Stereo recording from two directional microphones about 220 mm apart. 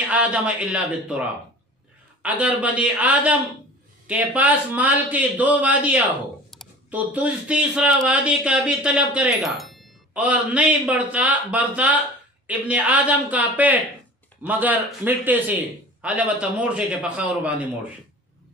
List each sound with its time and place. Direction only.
0.1 s a man's voice: 5° right (ahead or behind)